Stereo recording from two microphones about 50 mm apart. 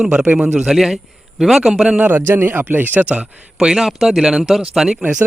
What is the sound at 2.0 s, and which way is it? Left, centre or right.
Speech, right.